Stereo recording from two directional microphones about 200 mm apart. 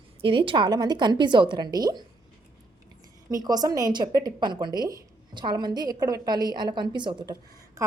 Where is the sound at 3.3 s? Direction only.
20° right (ahead or behind).